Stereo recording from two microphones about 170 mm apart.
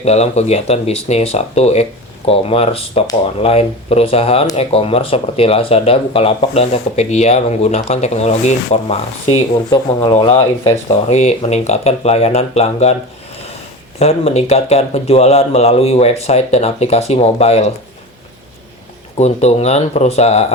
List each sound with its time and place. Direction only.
0.0 s speech: 40° left (ahead or behind)
14.0 s speech: 40° left (ahead or behind)
19.1 s speech: 40° left (ahead or behind)